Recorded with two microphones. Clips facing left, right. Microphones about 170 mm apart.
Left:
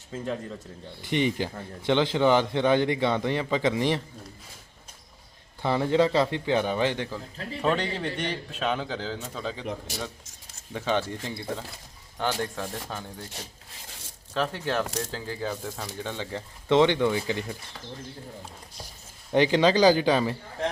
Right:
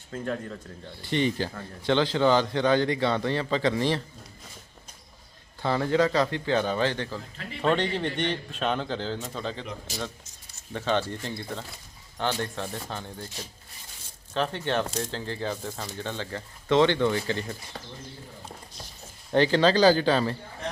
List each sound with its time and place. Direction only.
1.0 s speech: 15° left (ahead or behind)
5.6 s speech: 15° left (ahead or behind)
7.6 s speech: 5° left (ahead or behind)
9.6 s speech: 65° left (ahead or behind)
10.7 s speech: 10° left (ahead or behind)
14.3 s speech: 5° left (ahead or behind)
16.0 s speech: 15° left (ahead or behind)
19.3 s speech: 15° left (ahead or behind)